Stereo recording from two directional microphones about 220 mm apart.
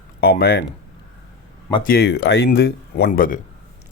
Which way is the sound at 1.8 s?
45° left (ahead or behind).